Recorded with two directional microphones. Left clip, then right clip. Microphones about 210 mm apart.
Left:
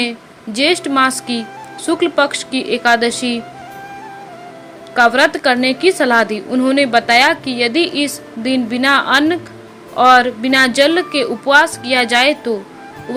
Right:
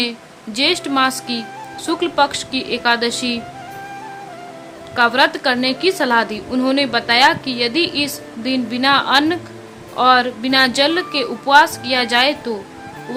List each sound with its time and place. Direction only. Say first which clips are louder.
0.0 s a woman's voice: left 2 dB; 15° left (ahead or behind)
4.9 s a woman's voice: left 3 dB; 15° left (ahead or behind)